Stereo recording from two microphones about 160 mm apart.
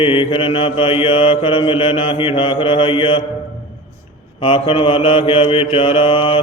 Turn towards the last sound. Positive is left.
turn(degrees=35)  # may be behind; listen again after turning